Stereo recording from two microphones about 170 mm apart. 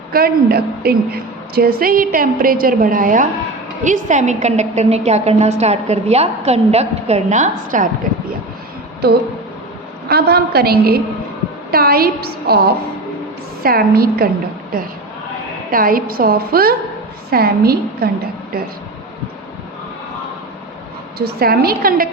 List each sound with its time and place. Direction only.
0.1 s a woman's voice: 65° right (ahead or behind)
9.0 s a woman's voice: 70° right (ahead or behind)
15.7 s a woman's voice: 55° right (ahead or behind)
21.2 s a woman's voice: 65° right (ahead or behind)